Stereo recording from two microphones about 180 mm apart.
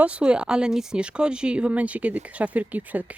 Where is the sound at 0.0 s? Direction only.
5° right (ahead or behind).